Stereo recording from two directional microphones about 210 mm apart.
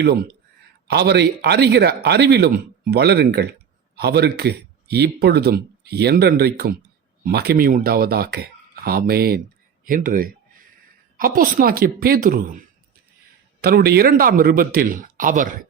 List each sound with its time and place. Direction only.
0.0 s speech: 50° right (ahead or behind)